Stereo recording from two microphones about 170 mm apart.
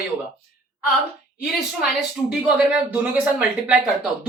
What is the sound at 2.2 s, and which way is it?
Speech, 5° right (ahead or behind).